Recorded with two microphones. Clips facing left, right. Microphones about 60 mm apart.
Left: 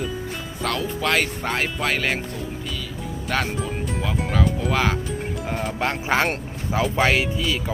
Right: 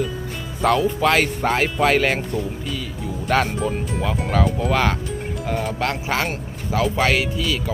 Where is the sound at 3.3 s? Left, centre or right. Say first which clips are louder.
Right 5 dB; centre.